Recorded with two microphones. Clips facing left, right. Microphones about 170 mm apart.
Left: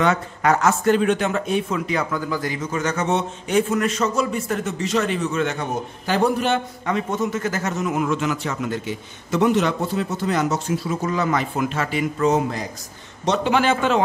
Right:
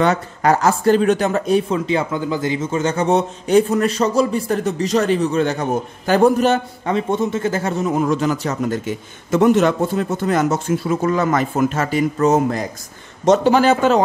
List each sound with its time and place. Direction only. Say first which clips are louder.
0.0 s speech: right 3 dB; 35° right (ahead or behind)